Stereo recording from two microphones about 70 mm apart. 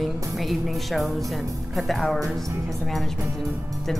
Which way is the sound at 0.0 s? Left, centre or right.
Centre.